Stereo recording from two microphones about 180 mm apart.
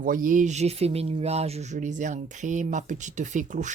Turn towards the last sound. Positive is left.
turn(degrees=-45)  # may be behind; listen again after turning